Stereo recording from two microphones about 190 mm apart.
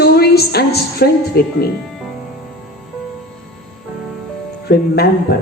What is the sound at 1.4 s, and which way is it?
Speech, 55° left (ahead or behind).